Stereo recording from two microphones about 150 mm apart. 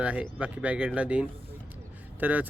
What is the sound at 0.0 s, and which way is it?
Speech, 10° right (ahead or behind).